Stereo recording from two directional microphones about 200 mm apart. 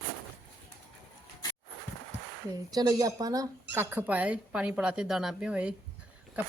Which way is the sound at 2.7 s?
20° right (ahead or behind).